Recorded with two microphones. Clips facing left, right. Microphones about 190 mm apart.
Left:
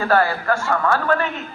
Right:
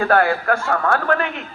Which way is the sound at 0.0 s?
60° right (ahead or behind).